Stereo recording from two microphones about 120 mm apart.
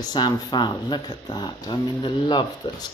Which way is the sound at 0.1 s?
35° left (ahead or behind).